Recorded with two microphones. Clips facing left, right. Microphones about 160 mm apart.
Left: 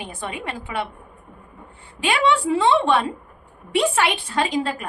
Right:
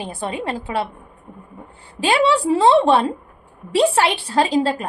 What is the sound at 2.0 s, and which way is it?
A woman's voice, 35° right (ahead or behind).